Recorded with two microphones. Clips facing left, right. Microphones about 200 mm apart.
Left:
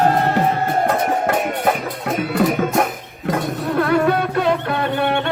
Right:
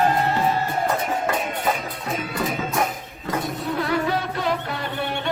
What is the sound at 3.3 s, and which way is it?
Music, 60° left (ahead or behind).